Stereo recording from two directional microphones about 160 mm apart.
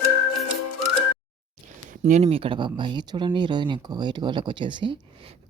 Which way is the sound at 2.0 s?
45° right (ahead or behind).